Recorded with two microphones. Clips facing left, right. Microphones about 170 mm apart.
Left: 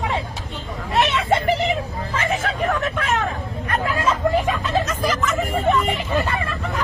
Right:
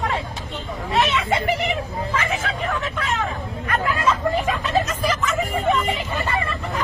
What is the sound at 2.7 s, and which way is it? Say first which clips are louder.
Vehicle: left 4 dB; 55° left (ahead or behind).